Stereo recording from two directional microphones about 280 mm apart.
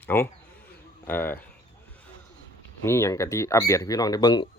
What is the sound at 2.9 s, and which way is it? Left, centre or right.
Speech, centre.